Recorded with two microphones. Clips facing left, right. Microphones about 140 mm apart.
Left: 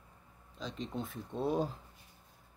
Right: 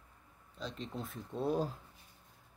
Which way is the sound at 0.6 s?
Centre (ahead or behind).